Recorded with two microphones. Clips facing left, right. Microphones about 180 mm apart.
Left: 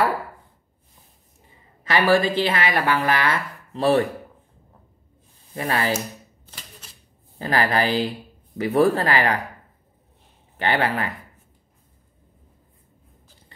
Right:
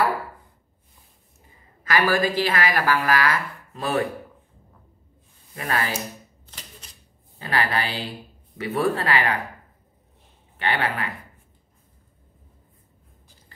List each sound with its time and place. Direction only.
1.9 s speech: 25° left (ahead or behind)
5.5 s speech: 30° left (ahead or behind)
7.3 s speech: 35° left (ahead or behind)
10.6 s speech: 35° left (ahead or behind)